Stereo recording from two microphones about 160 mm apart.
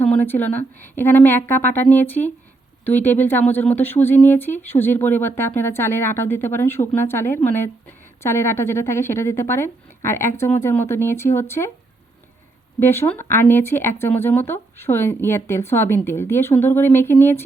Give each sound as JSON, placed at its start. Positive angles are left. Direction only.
{"t": 0.0, "sound": "speech", "side_deg": 10}
{"t": 12.8, "sound": "speech", "side_deg": 15}